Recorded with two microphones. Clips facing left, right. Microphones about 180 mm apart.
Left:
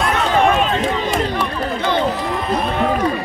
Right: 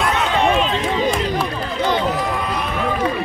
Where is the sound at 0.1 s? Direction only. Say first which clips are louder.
Left 3 dB; 45° left (ahead or behind).